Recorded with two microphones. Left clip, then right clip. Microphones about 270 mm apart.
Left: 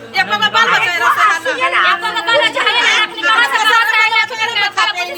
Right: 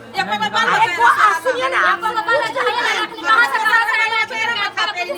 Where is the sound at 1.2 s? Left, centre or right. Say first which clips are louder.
Left 2 dB; centre.